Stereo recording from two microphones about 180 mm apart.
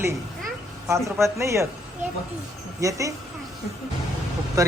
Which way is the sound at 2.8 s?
15° right (ahead or behind).